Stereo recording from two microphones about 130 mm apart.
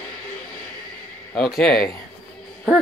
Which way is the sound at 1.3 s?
5° left (ahead or behind).